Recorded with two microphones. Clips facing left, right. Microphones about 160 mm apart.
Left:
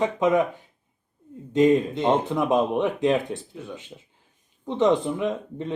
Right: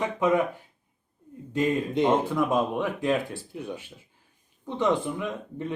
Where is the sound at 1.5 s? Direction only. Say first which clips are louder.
Left 7 dB; 20° left (ahead or behind).